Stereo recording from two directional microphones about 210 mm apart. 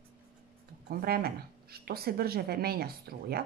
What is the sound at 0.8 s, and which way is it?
Speech, 45° right (ahead or behind).